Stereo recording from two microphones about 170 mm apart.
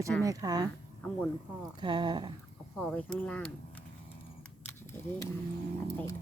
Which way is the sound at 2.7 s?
5° left (ahead or behind).